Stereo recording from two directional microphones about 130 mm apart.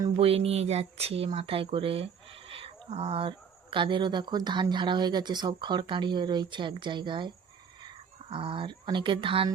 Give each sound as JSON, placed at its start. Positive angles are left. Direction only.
{"t": 0.2, "sound": "speech", "side_deg": -50}